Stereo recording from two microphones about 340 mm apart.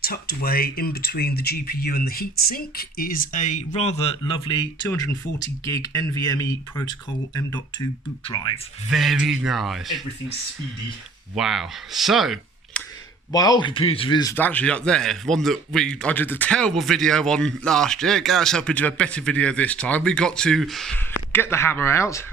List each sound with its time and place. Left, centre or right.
0.0 s speech: left; by 6.9 s centre
8.2 s speech: centre
8.9 s speech: centre
11.3 s speech: centre
13.3 s speech: centre